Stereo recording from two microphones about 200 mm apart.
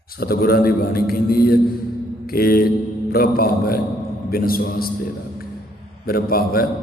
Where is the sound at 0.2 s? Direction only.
50° left (ahead or behind).